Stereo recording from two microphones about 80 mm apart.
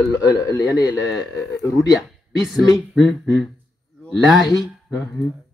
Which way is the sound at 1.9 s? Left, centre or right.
Centre.